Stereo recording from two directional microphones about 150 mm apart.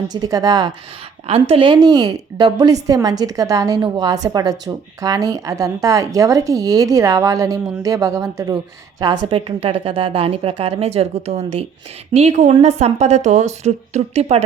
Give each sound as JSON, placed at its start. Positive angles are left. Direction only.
{"t": 0.1, "sound": "a woman's voice", "side_deg": -25}
{"t": 1.3, "sound": "a woman's voice", "side_deg": -40}